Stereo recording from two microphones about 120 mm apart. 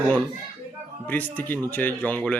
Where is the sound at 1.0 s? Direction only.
15° left (ahead or behind).